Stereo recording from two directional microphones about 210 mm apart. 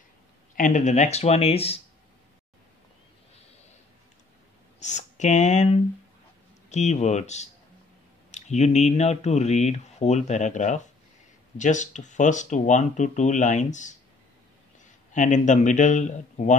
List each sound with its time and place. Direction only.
0.6 s speech: 35° left (ahead or behind)
4.7 s speech: 35° left (ahead or behind)
15.1 s speech: 35° left (ahead or behind)